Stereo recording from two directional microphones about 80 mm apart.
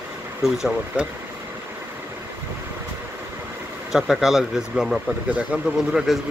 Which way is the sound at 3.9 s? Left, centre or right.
Centre.